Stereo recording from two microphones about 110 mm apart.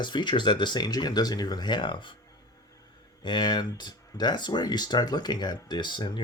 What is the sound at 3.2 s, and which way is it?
Speech, 45° left (ahead or behind).